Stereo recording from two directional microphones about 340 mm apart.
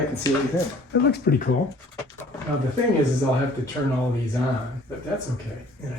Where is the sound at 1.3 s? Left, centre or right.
Left.